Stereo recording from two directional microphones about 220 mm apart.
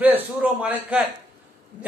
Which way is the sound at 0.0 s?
5° right (ahead or behind).